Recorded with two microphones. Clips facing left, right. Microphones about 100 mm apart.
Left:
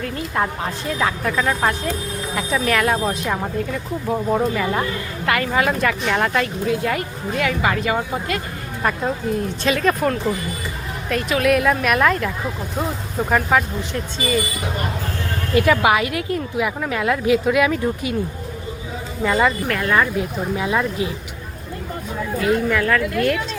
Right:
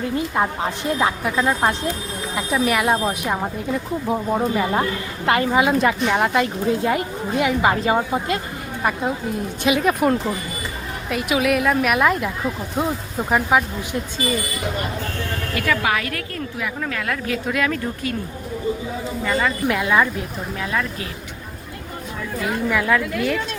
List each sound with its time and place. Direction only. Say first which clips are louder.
0.0 s a woman's voice: right 2 dB; 20° right (ahead or behind)
8.8 s a woman's voice: left 1 dB; 10° right (ahead or behind)
15.5 s speech: left 6 dB; 20° left (ahead or behind)
17.3 s speech: left 4 dB; 5° left (ahead or behind)
19.2 s speech: left 4 dB; 5° left (ahead or behind)
19.6 s a woman's voice: right 1 dB; 10° right (ahead or behind)
20.6 s speech: left 4 dB; 20° left (ahead or behind)
22.4 s a woman's voice: left 3 dB; centre (ahead or behind)